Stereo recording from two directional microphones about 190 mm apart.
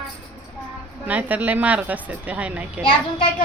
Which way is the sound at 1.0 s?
10° right (ahead or behind).